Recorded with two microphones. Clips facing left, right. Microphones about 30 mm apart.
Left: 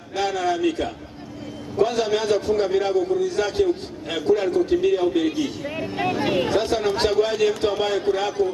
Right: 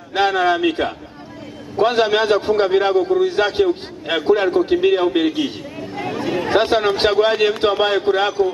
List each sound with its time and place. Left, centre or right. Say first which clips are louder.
0.1 s a man's voice: right 7 dB; right
6.5 s a man's voice: right 5 dB; right